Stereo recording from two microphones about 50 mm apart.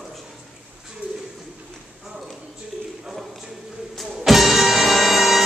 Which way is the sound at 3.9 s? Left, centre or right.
Centre.